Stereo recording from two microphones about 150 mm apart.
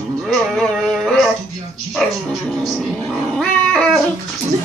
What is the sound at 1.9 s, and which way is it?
Cat, centre (ahead or behind).